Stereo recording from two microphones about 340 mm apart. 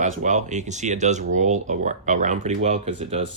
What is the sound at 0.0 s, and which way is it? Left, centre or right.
Speech, right.